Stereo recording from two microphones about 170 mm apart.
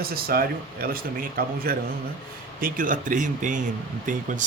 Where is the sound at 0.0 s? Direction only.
60° right (ahead or behind).